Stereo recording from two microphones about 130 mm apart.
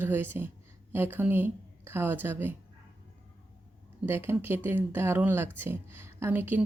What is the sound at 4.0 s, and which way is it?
A woman's voice, 15° right (ahead or behind).